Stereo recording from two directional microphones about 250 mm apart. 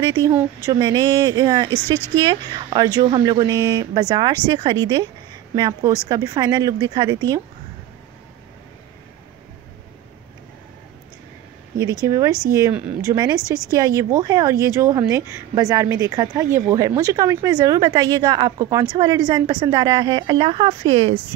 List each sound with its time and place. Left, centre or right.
0.1 s a woman's voice: centre
12.5 s a woman's voice: centre